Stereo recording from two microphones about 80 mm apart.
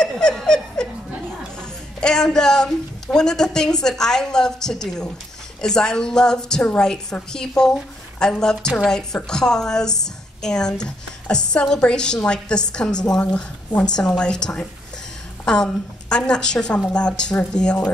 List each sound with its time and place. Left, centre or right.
0.0 s snicker: centre
1.6 s a woman's voice: centre